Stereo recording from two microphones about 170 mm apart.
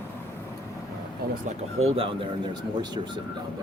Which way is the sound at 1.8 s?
35° right (ahead or behind).